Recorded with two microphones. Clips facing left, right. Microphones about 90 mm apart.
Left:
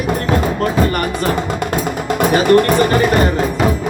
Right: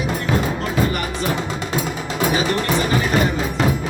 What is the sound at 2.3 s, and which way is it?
Speech, 55° left (ahead or behind).